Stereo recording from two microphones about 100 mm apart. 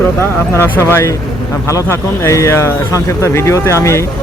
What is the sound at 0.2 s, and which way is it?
Speech, 25° left (ahead or behind).